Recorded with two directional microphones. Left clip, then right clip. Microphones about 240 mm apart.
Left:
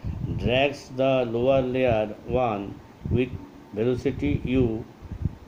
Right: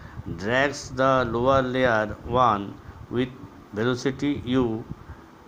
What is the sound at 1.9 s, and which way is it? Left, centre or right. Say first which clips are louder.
Speech: right 2 dB; right.